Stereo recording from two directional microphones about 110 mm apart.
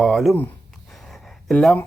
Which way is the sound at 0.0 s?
Centre (ahead or behind).